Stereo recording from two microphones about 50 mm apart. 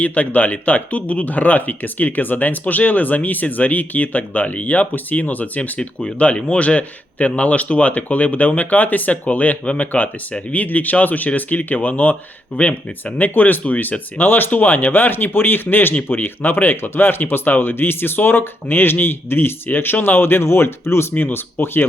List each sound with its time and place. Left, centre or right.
0.0 s speech: left
6.0 s speech: centre; by 21.2 s left
21.3 s speech: left